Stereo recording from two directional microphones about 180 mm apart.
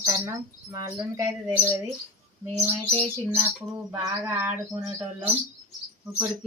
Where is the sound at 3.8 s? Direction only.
15° right (ahead or behind).